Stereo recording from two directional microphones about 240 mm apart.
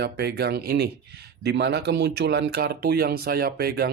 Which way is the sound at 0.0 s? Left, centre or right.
Right.